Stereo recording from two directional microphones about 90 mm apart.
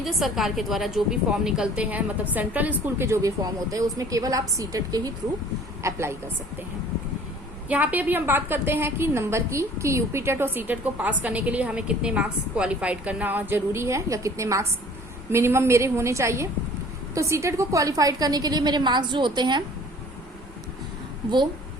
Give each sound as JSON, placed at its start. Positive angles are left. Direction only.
{"t": 0.0, "sound": "a woman's voice", "side_deg": 0}
{"t": 3.2, "sound": "a woman's voice", "side_deg": -40}
{"t": 5.8, "sound": "a woman's voice", "side_deg": -30}
{"t": 7.7, "sound": "a woman's voice", "side_deg": -15}